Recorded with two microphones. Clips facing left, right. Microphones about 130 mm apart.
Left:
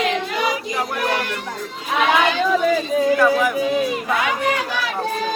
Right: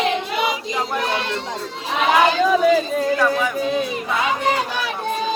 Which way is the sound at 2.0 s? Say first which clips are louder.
Right 2 dB; 35° right (ahead or behind).